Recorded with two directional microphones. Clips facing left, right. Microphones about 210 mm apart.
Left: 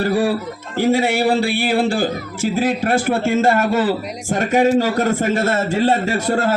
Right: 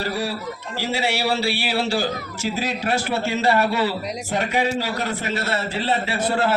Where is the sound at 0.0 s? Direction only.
50° left (ahead or behind).